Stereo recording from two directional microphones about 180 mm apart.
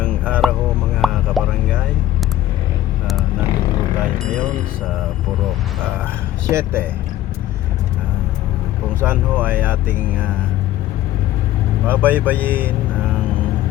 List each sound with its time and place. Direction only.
0.4 s a sound: centre (ahead or behind)
1.0 s music: centre (ahead or behind)
6.5 s speech: 15° right (ahead or behind)
9.0 s speech: 10° right (ahead or behind)
11.9 s speech: 10° right (ahead or behind)
12.2 s speech: 10° left (ahead or behind)